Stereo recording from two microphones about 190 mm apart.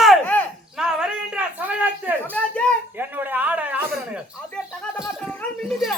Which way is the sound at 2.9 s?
10° right (ahead or behind).